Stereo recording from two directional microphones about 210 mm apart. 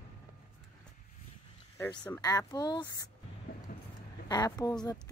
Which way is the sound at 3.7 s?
40° left (ahead or behind).